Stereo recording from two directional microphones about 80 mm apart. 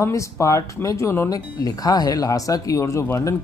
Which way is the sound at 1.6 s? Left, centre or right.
Left.